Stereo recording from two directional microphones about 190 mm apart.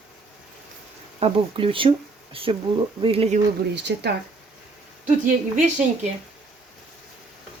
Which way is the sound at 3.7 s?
65° right (ahead or behind).